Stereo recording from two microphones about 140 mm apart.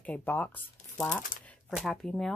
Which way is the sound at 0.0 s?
10° left (ahead or behind).